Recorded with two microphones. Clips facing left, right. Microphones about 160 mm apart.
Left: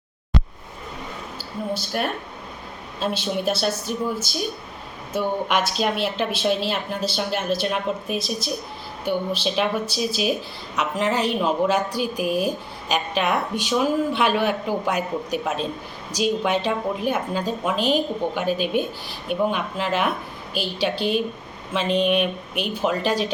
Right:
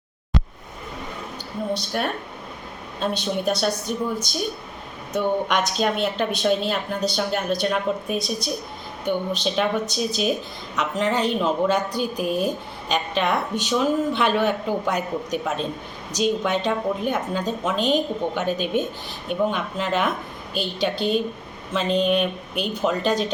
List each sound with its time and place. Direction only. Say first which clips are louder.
1.7 s a woman's voice: even; centre (ahead or behind)